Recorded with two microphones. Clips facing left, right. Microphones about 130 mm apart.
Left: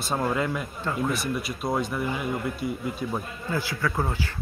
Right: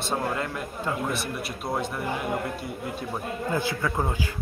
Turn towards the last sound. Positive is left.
turn(degrees=-20)  # may be behind; listen again after turning